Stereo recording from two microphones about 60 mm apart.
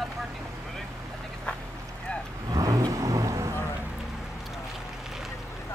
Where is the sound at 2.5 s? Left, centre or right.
Right.